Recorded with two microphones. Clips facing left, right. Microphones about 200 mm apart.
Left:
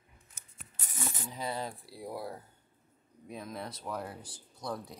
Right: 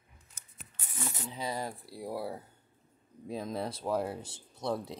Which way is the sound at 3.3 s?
30° right (ahead or behind).